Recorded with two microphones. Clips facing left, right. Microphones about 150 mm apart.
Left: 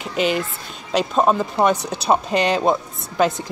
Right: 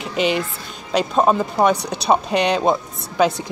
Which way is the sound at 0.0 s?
Centre (ahead or behind).